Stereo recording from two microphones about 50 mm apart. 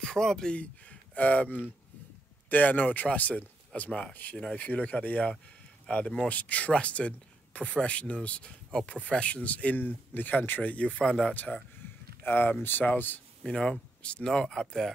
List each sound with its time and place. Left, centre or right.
0.0 s speech: centre
0.6 s speech: left
6.2 s speech: left
11.0 s speech: centre
12.2 s speech: left
13.5 s speech: centre